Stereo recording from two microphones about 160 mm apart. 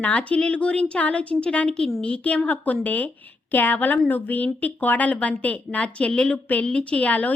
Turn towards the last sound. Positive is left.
turn(degrees=10)  # may be behind; listen again after turning